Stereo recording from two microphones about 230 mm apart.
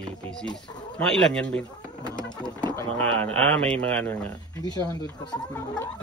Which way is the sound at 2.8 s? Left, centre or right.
Centre.